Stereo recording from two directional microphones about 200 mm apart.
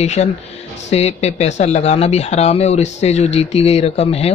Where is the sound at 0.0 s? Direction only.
35° left (ahead or behind).